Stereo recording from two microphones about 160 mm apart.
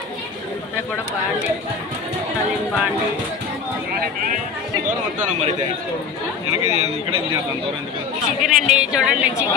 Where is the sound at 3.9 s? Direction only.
65° right (ahead or behind).